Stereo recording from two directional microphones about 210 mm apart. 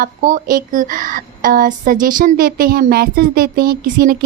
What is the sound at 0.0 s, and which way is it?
Speech, 40° right (ahead or behind).